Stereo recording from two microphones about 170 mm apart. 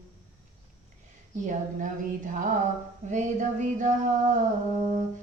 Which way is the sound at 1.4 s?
50° right (ahead or behind).